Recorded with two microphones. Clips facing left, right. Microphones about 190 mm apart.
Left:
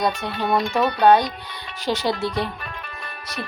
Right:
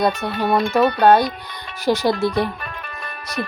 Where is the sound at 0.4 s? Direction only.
50° right (ahead or behind).